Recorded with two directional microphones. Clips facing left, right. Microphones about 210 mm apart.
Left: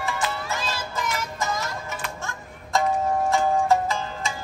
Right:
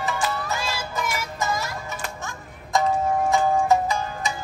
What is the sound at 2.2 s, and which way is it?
Music, 15° right (ahead or behind).